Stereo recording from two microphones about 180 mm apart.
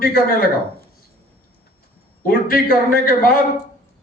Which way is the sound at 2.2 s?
55° left (ahead or behind).